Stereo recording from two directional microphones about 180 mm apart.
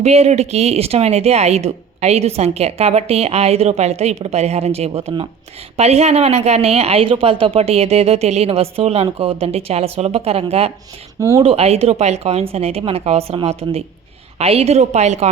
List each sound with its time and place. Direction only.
0.0 s speech: 35° right (ahead or behind)